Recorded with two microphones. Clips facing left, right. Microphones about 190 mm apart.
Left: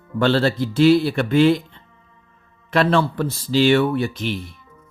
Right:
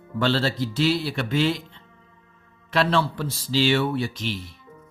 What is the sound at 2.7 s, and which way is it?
Speech, 50° left (ahead or behind).